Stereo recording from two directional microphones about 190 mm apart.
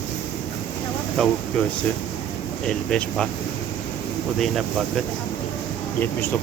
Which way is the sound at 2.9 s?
5° left (ahead or behind).